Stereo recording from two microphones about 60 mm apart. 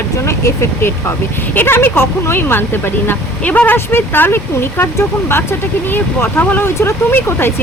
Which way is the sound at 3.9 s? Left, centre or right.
Left.